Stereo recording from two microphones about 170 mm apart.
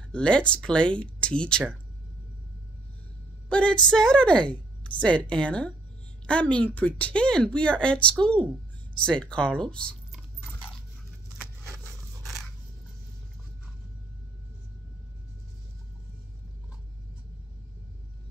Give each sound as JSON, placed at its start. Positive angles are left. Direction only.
{"t": 0.1, "sound": "speech", "side_deg": 5}
{"t": 3.4, "sound": "speech", "side_deg": 5}
{"t": 9.0, "sound": "chewing", "side_deg": 5}
{"t": 11.6, "sound": "a sound", "side_deg": -20}